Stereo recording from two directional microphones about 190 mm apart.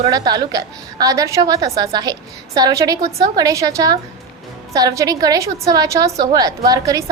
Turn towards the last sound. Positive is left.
turn(degrees=-20)  # may be behind; listen again after turning